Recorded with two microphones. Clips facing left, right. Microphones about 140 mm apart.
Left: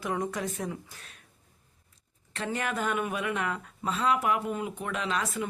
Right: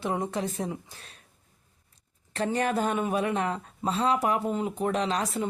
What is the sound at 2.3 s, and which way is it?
Speech, 35° right (ahead or behind).